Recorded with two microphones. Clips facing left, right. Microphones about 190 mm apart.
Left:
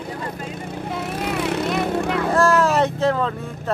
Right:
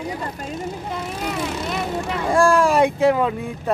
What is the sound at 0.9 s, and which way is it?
Vehicle, centre (ahead or behind).